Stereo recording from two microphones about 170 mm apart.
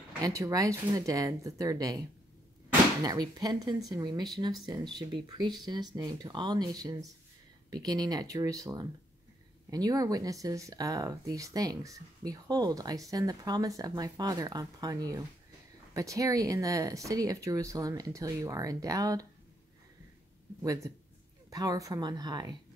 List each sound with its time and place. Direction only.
0.2 s speech: 20° right (ahead or behind)
20.6 s speech: 20° right (ahead or behind)